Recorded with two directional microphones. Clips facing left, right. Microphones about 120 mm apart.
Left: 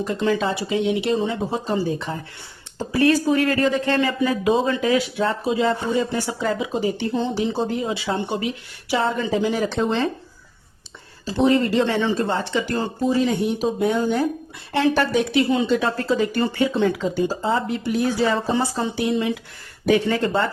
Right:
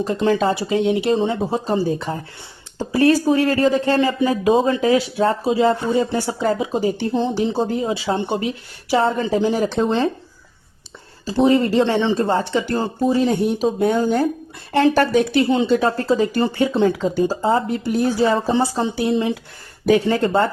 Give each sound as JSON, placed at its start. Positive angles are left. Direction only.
{"t": 0.0, "sound": "speech", "side_deg": -30}
{"t": 11.4, "sound": "a woman's voice", "side_deg": -35}
{"t": 15.3, "sound": "speech", "side_deg": -35}
{"t": 18.5, "sound": "speech", "side_deg": -30}